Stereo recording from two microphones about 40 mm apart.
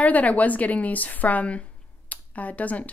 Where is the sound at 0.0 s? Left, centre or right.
Left.